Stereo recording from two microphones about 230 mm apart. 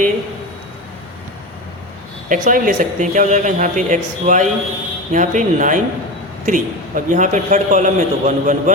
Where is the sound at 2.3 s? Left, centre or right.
Right.